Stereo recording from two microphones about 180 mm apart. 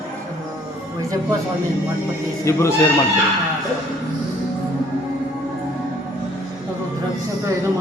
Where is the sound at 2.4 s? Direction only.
15° left (ahead or behind).